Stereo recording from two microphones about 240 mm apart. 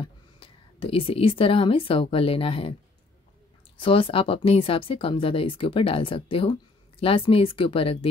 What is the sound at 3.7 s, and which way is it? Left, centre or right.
Speech, left.